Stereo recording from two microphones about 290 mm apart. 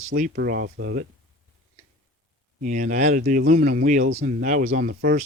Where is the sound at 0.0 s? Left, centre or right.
Right.